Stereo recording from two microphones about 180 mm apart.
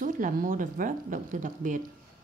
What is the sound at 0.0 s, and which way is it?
A woman's voice, 50° right (ahead or behind).